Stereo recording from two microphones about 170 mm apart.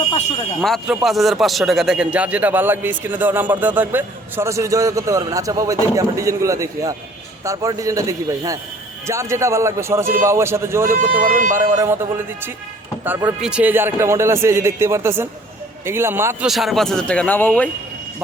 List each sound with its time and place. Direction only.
0.6 s a man's voice: centre (ahead or behind); by 10.8 s 15° right (ahead or behind)
10.8 s speech: 55° right (ahead or behind)
11.8 s a man's voice: 15° right (ahead or behind)
16.5 s a man's voice: centre (ahead or behind)